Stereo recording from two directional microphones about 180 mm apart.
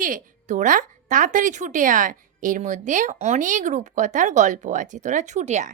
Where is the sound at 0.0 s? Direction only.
45° right (ahead or behind).